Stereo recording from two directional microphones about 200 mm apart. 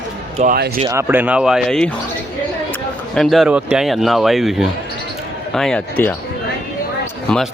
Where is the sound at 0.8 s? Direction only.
10° right (ahead or behind).